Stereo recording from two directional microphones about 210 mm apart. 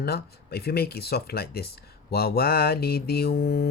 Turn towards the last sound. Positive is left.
turn(degrees=50)  # may be behind; listen again after turning